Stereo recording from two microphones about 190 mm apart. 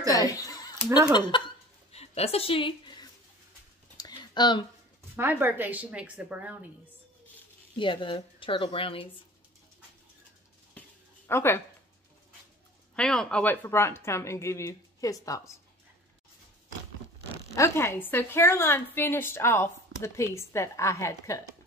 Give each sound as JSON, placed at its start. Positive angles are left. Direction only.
{"t": 0.1, "sound": "chuckle", "side_deg": 20}
{"t": 1.3, "sound": "speech", "side_deg": 25}
{"t": 1.9, "sound": "a sound", "side_deg": 35}
{"t": 5.1, "sound": "a woman's voice", "side_deg": -10}
{"t": 7.7, "sound": "speech", "side_deg": 25}
{"t": 11.2, "sound": "a woman's voice", "side_deg": 10}
{"t": 12.9, "sound": "a woman's voice", "side_deg": 5}
{"t": 17.6, "sound": "a woman's voice", "side_deg": 15}